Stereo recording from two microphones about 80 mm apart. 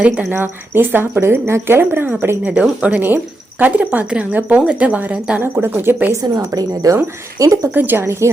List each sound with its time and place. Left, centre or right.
0.4 s speech: right
5.4 s speech: right
6.2 s speech: right
7.7 s speech: right